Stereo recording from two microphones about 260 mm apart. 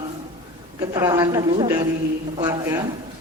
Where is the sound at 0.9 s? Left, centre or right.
Centre.